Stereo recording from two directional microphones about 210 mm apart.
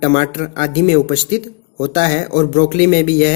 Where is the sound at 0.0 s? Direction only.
30° left (ahead or behind).